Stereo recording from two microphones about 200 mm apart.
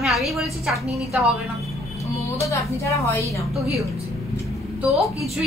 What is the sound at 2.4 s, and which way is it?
Speech, 15° left (ahead or behind).